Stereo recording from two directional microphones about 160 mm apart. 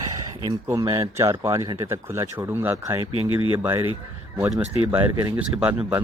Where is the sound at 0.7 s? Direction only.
20° right (ahead or behind).